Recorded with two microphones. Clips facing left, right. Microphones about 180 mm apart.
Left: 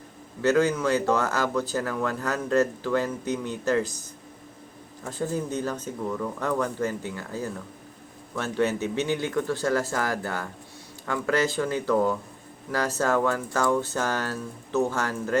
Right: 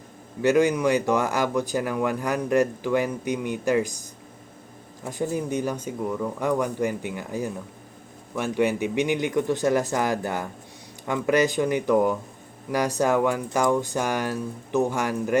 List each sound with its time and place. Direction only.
0.4 s speech: 15° right (ahead or behind)